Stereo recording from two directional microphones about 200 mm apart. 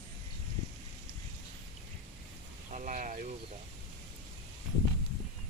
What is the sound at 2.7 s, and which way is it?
Speech, 40° right (ahead or behind).